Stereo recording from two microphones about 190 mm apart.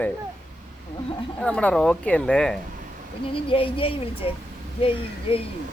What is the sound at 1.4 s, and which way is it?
Speech, 5° left (ahead or behind).